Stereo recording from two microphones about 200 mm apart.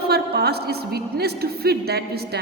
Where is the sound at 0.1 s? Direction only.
50° right (ahead or behind).